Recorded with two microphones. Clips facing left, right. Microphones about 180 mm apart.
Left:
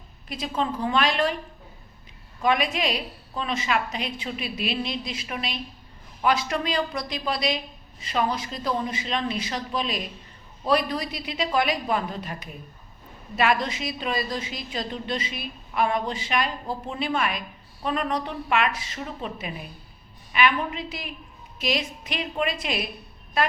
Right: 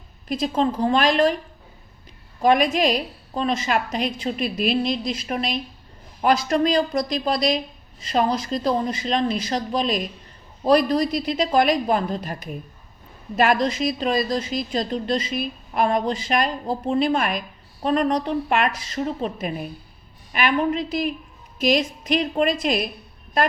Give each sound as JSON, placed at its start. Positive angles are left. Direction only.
{"t": 0.3, "sound": "a woman's voice", "side_deg": -40}
{"t": 2.4, "sound": "a woman's voice", "side_deg": -40}